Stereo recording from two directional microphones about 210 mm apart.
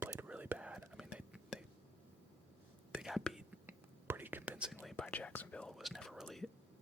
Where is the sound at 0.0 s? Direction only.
10° right (ahead or behind).